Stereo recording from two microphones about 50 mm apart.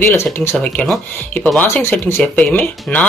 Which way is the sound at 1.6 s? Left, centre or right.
Left.